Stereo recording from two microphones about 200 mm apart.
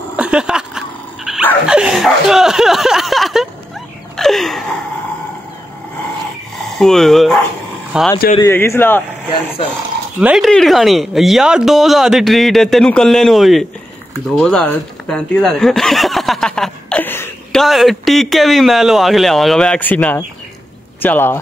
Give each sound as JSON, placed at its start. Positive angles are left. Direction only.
{"t": 0.1, "sound": "dog", "side_deg": -5}
{"t": 1.7, "sound": "a sound", "side_deg": -5}
{"t": 4.2, "sound": "wheeze", "side_deg": 0}
{"t": 6.8, "sound": "speech", "side_deg": 0}
{"t": 8.4, "sound": "speech", "side_deg": 15}
{"t": 9.6, "sound": "speech", "side_deg": 30}
{"t": 10.2, "sound": "speech", "side_deg": 0}
{"t": 14.3, "sound": "snicker", "side_deg": 5}
{"t": 17.6, "sound": "speech", "side_deg": 0}